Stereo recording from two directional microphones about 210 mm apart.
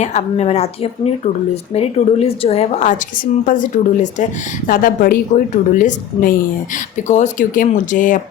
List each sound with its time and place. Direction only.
0.0 s a woman's voice: 35° left (ahead or behind)